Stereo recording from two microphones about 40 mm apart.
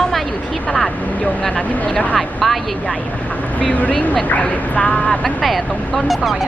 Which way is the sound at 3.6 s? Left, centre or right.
Left.